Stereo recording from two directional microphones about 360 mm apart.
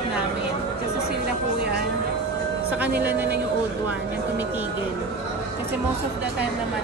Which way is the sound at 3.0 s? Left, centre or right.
Centre.